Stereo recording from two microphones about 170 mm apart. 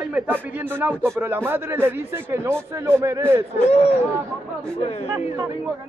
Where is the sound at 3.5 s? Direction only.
40° left (ahead or behind).